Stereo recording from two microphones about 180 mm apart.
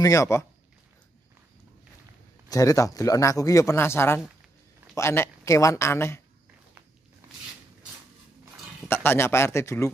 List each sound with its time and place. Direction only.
0.0 s speech: 15° left (ahead or behind)
2.5 s speech: 15° left (ahead or behind)
8.8 s speech: 10° left (ahead or behind)